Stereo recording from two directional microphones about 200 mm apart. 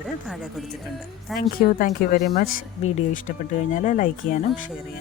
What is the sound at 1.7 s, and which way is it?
Speech, 40° left (ahead or behind).